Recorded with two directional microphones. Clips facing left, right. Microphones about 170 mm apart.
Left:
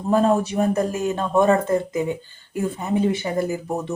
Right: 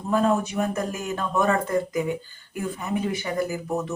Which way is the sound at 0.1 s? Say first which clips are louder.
Left 4 dB; 35° left (ahead or behind).